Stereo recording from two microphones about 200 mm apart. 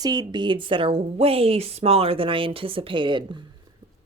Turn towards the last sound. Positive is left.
turn(degrees=-25)  # may be behind; listen again after turning